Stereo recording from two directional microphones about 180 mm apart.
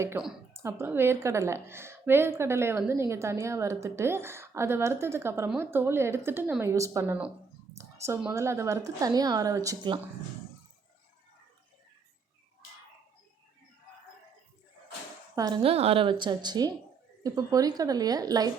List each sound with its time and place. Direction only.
0.5 s a woman's voice: 15° right (ahead or behind)
7.8 s a sound: 15° right (ahead or behind)
8.2 s a woman's voice: 15° right (ahead or behind)
15.4 s a woman's voice: 20° right (ahead or behind)
15.6 s a woman's voice: 35° right (ahead or behind)